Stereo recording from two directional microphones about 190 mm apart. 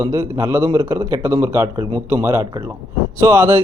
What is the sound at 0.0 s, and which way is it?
A man's voice, 15° right (ahead or behind).